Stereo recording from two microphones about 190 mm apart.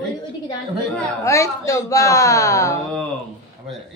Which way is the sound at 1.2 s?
15° left (ahead or behind).